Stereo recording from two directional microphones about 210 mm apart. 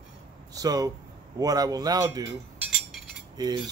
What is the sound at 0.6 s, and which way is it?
Speech, 15° right (ahead or behind).